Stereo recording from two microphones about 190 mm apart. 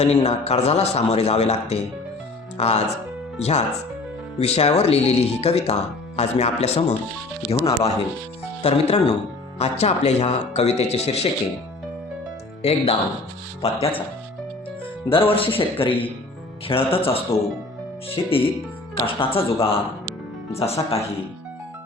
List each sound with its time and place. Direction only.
0.0 s speech: 35° left (ahead or behind)
12.6 s speech: 30° left (ahead or behind)
15.1 s speech: 30° left (ahead or behind)